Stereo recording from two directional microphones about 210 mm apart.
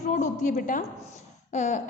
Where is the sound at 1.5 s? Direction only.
35° left (ahead or behind).